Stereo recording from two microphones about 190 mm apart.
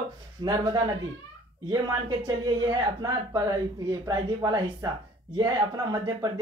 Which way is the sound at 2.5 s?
20° right (ahead or behind).